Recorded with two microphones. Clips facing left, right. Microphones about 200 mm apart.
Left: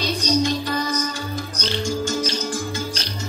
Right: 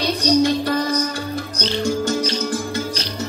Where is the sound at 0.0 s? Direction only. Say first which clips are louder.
Right 4 dB; 60° right (ahead or behind).